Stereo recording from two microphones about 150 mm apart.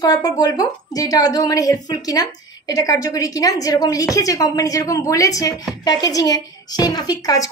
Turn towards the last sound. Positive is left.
turn(degrees=25)  # may be behind; listen again after turning